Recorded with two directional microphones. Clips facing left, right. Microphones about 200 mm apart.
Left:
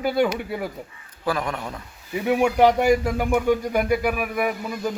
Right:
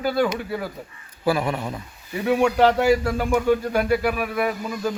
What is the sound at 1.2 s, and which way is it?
Speech, 10° right (ahead or behind).